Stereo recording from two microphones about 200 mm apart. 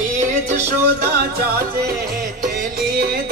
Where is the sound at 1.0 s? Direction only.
50° right (ahead or behind).